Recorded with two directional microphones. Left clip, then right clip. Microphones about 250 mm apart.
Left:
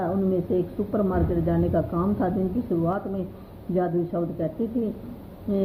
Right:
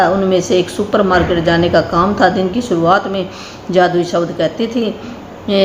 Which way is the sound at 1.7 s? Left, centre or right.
Right.